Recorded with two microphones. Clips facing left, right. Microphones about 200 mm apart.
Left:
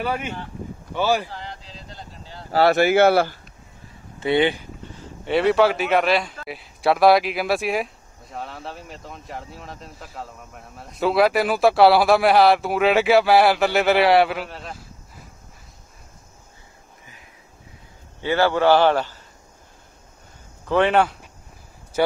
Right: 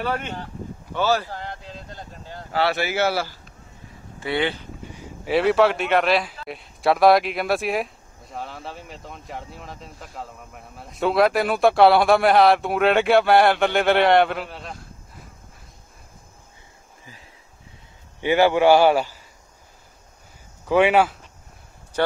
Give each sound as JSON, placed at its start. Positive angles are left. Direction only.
{"t": 0.0, "sound": "speech", "side_deg": 10}
{"t": 1.3, "sound": "a sound", "side_deg": -55}
{"t": 2.5, "sound": "speech", "side_deg": 45}
{"t": 4.2, "sound": "speech", "side_deg": 20}
{"t": 4.9, "sound": "speech", "side_deg": -10}
{"t": 18.2, "sound": "a man's voice", "side_deg": -15}
{"t": 20.6, "sound": "a man's voice", "side_deg": -10}
{"t": 21.9, "sound": "speech", "side_deg": 10}